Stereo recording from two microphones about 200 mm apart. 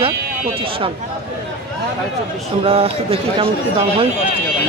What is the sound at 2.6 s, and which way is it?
Speech, 30° right (ahead or behind).